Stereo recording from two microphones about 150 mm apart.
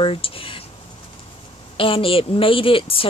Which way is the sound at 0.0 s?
40° left (ahead or behind).